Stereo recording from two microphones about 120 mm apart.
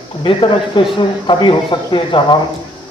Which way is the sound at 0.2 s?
45° left (ahead or behind).